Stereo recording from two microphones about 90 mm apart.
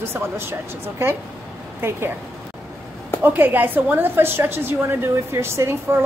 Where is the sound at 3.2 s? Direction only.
20° right (ahead or behind).